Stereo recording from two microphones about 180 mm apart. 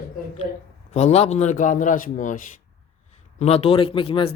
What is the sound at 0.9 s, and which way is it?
A man's voice, 40° left (ahead or behind).